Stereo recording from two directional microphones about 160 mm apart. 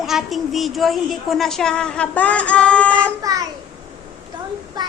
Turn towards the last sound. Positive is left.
turn(degrees=-25)  # may be behind; listen again after turning